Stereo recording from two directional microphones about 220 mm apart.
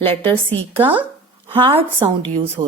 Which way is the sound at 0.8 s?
10° right (ahead or behind).